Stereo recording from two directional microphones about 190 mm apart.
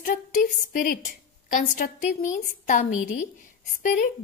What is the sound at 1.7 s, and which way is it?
A woman's voice, 40° left (ahead or behind).